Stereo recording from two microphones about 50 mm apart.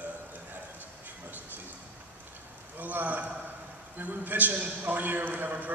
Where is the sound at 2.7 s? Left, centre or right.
Right.